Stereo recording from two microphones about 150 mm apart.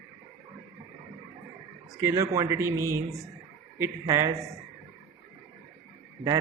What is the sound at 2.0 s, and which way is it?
Speech, 20° right (ahead or behind).